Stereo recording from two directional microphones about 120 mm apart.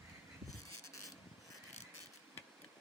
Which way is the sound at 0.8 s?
25° left (ahead or behind).